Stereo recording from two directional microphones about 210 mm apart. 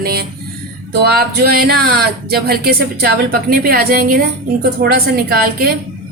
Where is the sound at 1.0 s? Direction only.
50° right (ahead or behind).